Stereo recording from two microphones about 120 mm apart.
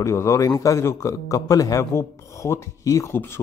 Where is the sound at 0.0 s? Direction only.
25° left (ahead or behind).